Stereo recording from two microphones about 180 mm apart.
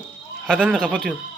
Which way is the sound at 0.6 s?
5° left (ahead or behind).